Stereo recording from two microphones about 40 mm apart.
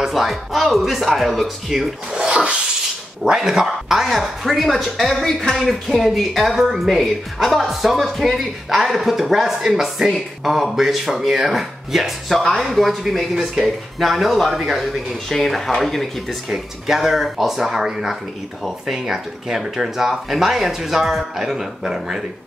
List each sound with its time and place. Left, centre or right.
0.0 s speech: centre
2.1 s speech: right
3.3 s speech: centre
4.0 s speech: centre
12.3 s speech: centre
15.2 s speech: centre
16.4 s speech: centre